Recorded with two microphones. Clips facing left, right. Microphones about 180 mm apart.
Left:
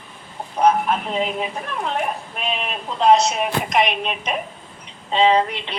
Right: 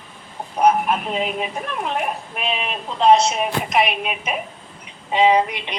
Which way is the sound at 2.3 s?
Centre (ahead or behind).